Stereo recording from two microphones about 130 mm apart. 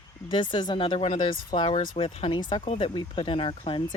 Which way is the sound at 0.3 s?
40° left (ahead or behind).